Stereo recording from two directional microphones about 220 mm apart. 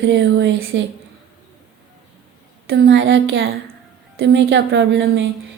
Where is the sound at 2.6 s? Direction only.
55° right (ahead or behind).